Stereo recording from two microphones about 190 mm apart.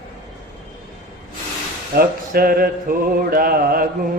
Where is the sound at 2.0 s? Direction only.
50° right (ahead or behind).